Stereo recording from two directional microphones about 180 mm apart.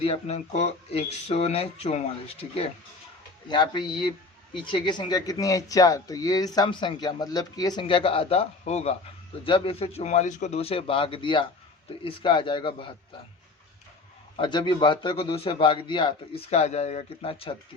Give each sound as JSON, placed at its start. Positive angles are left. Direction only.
{"t": 0.0, "sound": "a man's voice", "side_deg": 35}
{"t": 14.3, "sound": "a man's voice", "side_deg": 25}